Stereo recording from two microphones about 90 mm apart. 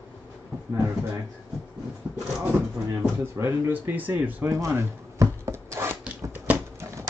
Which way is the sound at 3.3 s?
25° right (ahead or behind).